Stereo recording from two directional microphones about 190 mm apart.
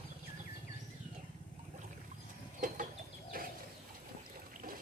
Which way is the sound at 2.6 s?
45° right (ahead or behind).